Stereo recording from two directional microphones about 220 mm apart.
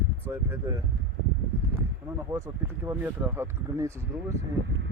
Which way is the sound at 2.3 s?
15° right (ahead or behind).